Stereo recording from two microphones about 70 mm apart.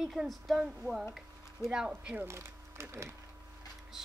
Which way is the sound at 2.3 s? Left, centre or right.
Right.